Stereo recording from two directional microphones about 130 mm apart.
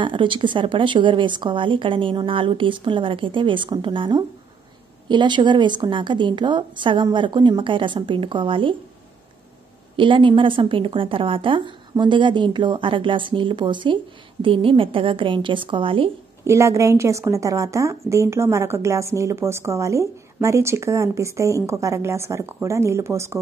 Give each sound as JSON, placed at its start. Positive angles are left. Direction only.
{"t": 0.0, "sound": "speech", "side_deg": -40}
{"t": 9.9, "sound": "speech", "side_deg": -40}
{"t": 16.4, "sound": "a woman's voice", "side_deg": -20}